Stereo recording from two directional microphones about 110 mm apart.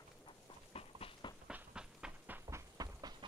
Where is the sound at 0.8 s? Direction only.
60° left (ahead or behind).